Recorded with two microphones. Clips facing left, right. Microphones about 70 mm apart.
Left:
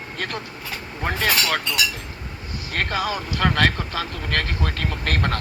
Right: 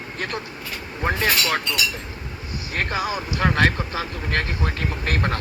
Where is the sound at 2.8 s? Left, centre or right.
Right.